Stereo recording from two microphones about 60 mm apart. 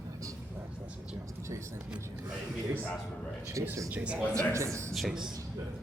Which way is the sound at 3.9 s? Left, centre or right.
Centre.